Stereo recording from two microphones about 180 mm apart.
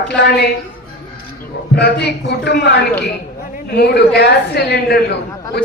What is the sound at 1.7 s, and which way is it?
A man's voice, 65° left (ahead or behind).